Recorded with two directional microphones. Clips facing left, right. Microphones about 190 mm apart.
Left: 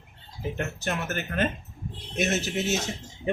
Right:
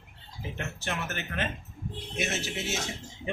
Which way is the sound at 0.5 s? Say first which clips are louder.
Left 4 dB; 40° left (ahead or behind).